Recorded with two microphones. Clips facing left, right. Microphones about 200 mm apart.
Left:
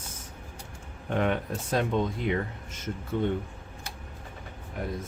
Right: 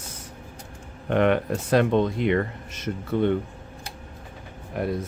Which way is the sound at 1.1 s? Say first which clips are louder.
Right 7 dB; 75° right (ahead or behind).